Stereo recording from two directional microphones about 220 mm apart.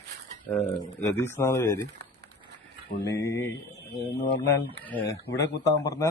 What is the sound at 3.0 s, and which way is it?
Speech, 15° left (ahead or behind).